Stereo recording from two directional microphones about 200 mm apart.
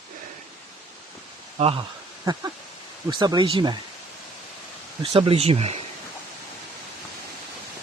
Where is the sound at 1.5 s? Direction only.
30° right (ahead or behind).